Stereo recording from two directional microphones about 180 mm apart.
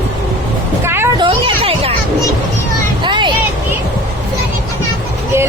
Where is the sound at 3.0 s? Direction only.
25° right (ahead or behind).